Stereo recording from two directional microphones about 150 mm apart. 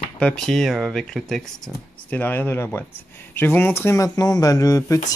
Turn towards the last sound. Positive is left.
turn(degrees=20)  # may be behind; listen again after turning